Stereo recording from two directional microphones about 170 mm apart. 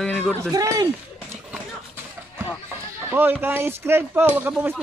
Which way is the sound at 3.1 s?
10° right (ahead or behind).